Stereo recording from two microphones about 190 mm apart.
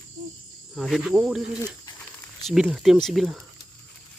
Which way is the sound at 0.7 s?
Centre (ahead or behind).